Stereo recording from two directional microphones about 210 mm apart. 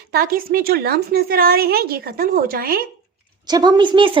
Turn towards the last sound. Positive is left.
turn(degrees=-25)  # may be behind; listen again after turning